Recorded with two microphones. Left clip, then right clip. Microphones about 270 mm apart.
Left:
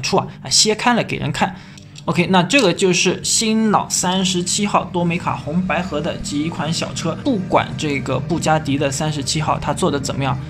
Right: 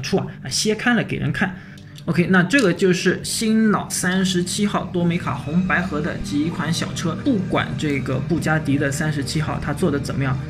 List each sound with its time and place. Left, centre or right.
0.0 s speech: centre